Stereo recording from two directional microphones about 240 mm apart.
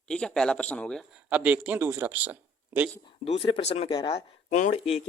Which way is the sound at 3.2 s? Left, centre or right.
Left.